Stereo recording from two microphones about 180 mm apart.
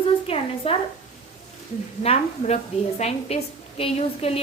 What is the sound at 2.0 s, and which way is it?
A woman's voice, 35° left (ahead or behind).